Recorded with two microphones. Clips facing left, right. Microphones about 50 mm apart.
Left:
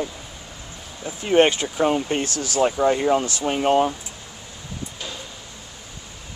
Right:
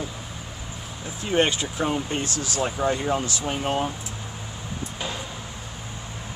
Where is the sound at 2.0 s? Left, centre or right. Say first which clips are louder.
Left 4 dB; left.